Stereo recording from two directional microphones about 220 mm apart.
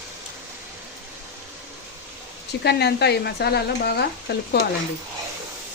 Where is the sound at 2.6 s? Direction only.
50° left (ahead or behind).